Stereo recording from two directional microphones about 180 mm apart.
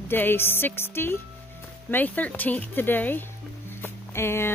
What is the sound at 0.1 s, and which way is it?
Speech, 10° left (ahead or behind).